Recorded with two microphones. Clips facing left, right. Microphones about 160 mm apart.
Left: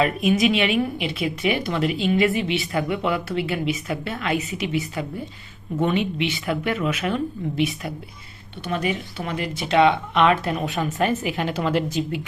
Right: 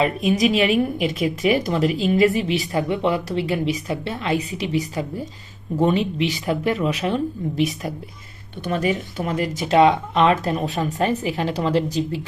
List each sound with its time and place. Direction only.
0.0 s a woman's voice: 30° right (ahead or behind)